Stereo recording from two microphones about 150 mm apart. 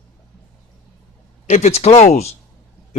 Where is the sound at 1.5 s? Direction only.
50° left (ahead or behind).